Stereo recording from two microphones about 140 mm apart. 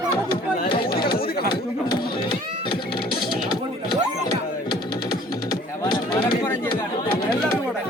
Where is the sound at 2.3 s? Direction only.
35° left (ahead or behind).